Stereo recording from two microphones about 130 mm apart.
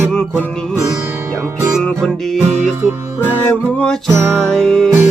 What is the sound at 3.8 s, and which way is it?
Music, 5° left (ahead or behind).